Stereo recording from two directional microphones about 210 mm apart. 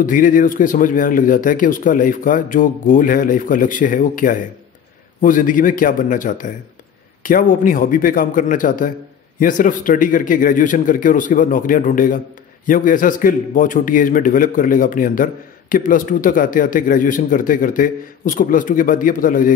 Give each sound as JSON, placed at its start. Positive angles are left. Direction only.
{"t": 0.0, "sound": "speech", "side_deg": 40}